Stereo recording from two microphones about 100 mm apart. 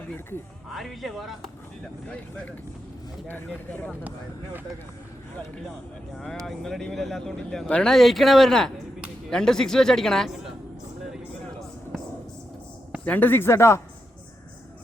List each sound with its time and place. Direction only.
0.7 s speech: centre (ahead or behind)
3.2 s speech: 20° left (ahead or behind)
6.4 s speech: 5° left (ahead or behind)
11.0 s a sound: 5° right (ahead or behind)
13.1 s speech: 20° left (ahead or behind)